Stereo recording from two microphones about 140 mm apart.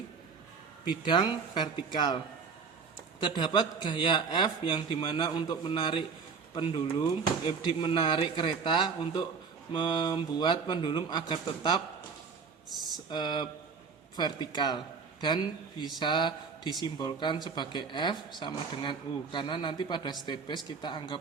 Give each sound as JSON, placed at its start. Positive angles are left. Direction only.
{"t": 0.9, "sound": "speech", "side_deg": 30}
{"t": 3.2, "sound": "speech", "side_deg": 35}
{"t": 13.1, "sound": "a man's voice", "side_deg": 30}